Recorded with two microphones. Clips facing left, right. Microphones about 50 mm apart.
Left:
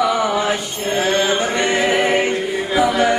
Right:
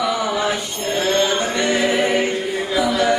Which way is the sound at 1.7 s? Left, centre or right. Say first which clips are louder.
Left 1 dB; left.